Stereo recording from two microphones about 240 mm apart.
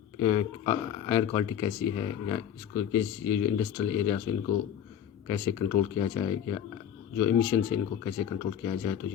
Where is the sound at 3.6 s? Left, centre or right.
Centre.